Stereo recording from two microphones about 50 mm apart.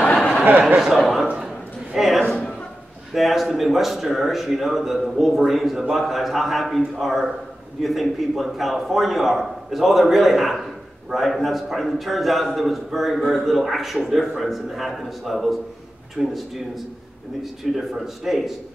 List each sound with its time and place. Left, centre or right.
0.5 s speech: right
0.9 s a man's voice: centre
2.0 s a sound: centre
2.2 s a sound: left
3.1 s a man's voice: centre
17.4 s a man's voice: centre